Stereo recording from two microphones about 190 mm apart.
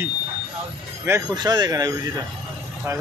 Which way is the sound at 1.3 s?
20° right (ahead or behind).